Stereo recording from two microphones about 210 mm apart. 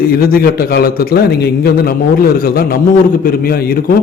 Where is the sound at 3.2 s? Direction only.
45° left (ahead or behind).